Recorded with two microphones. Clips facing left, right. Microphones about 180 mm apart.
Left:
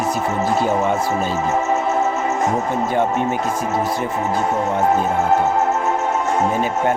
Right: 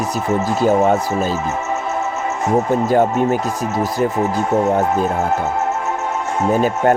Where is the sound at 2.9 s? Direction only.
40° right (ahead or behind).